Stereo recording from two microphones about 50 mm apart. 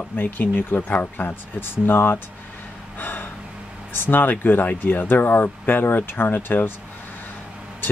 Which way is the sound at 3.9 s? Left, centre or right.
Left.